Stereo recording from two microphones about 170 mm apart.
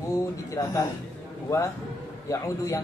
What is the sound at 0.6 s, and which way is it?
Speech, 20° left (ahead or behind).